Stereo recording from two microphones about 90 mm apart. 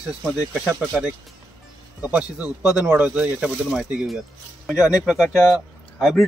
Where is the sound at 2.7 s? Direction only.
15° right (ahead or behind).